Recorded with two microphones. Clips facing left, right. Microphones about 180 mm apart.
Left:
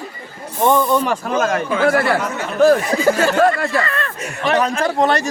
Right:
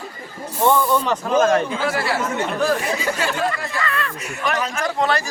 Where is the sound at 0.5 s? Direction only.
10° left (ahead or behind).